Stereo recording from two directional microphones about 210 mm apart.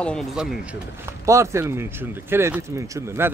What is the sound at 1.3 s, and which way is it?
Speech, 15° right (ahead or behind).